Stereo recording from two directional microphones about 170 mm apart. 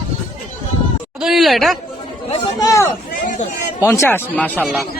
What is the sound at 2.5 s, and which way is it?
Speech, 20° left (ahead or behind).